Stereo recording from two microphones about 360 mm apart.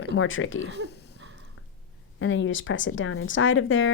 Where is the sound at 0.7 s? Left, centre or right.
Right.